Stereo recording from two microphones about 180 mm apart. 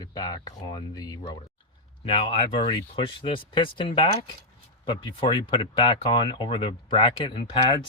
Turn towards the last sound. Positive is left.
turn(degrees=30)  # may be behind; listen again after turning